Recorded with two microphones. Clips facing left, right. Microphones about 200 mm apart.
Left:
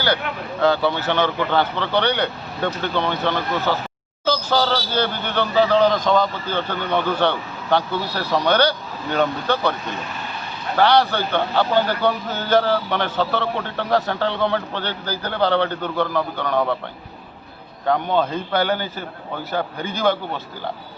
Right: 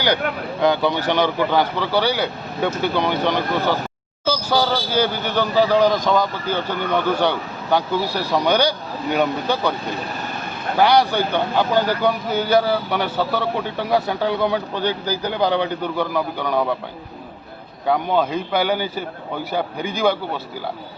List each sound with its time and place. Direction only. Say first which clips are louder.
0.6 s a man's voice: even; 15° right (ahead or behind)
10.2 s vehicle: right 3 dB; 50° right (ahead or behind)
10.8 s a man's voice: right 1 dB; 10° right (ahead or behind)
17.8 s a man's voice: right 1 dB; 10° right (ahead or behind)